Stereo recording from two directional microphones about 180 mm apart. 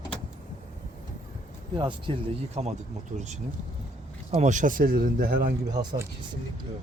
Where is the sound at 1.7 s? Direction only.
25° right (ahead or behind); by 5.5 s 55° right (ahead or behind).